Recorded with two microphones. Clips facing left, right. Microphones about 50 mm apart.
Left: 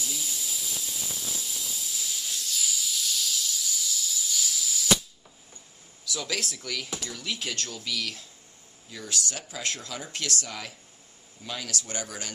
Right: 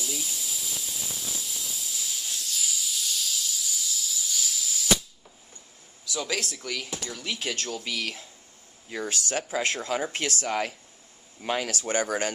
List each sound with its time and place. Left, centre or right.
0.0 s hiss: centre
6.0 s speech: centre
7.8 s speech: centre
8.8 s speech: right
9.6 s speech: centre
9.8 s speech: right
11.4 s speech: right